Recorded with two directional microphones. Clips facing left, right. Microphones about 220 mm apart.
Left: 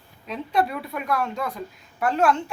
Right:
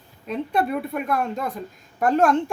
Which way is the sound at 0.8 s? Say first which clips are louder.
Right 2 dB; 50° right (ahead or behind).